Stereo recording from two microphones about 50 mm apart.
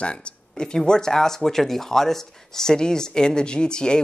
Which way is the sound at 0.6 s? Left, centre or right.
Centre.